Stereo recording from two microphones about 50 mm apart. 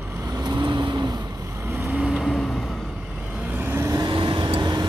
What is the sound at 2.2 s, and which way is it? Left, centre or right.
Vehicle, centre.